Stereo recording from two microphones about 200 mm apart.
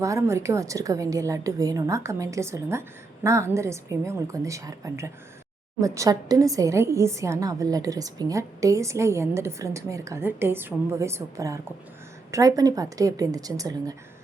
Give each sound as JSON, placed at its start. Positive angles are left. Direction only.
{"t": 0.0, "sound": "a woman's voice", "side_deg": -15}